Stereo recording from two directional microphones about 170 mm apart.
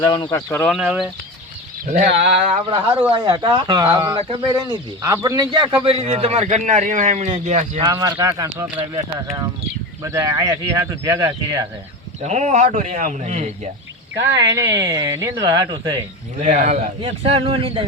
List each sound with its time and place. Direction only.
0.0 s speech: 25° left (ahead or behind)
0.7 s speech: 5° right (ahead or behind)
1.9 s a man's voice: 45° right (ahead or behind)
3.1 s a man's voice: 30° right (ahead or behind)
5.0 s a man's voice: 20° right (ahead or behind); by 7.8 s 45° right (ahead or behind)
7.8 s speech: 20° right (ahead or behind)
10.0 s speech: 20° right (ahead or behind)
12.2 s a man's voice: 45° right (ahead or behind)
14.5 s speech: 20° right (ahead or behind)
16.4 s a man's voice: 45° right (ahead or behind)